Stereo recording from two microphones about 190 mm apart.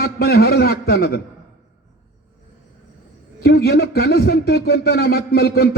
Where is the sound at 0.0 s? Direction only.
55° left (ahead or behind).